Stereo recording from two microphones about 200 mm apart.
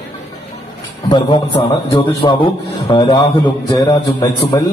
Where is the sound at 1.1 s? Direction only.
25° left (ahead or behind).